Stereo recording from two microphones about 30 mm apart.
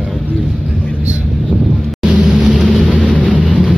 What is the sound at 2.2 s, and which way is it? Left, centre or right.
Vehicle, right.